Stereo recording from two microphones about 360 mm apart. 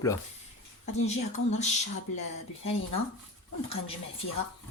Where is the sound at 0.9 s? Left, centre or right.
Centre.